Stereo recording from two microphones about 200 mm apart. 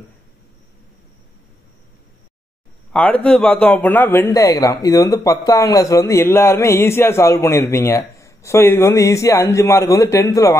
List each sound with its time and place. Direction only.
2.9 s a man's voice: 5° left (ahead or behind)